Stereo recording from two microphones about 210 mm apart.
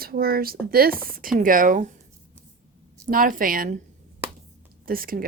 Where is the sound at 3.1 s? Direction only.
40° right (ahead or behind).